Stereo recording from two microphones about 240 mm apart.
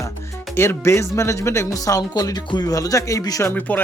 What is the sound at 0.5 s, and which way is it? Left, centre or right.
Speech, centre.